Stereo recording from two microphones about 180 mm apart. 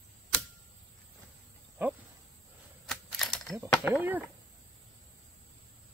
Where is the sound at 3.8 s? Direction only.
10° right (ahead or behind).